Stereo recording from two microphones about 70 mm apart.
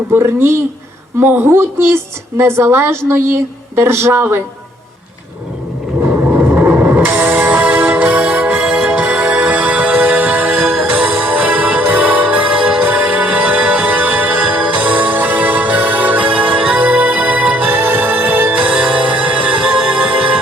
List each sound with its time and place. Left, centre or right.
0.2 s a woman's voice: right
1.2 s speech: right
1.5 s a woman's voice: right
6.2 s vehicle: right
6.7 s music: right